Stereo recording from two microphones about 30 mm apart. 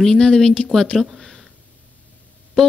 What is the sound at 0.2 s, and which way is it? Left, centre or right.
Speech, left.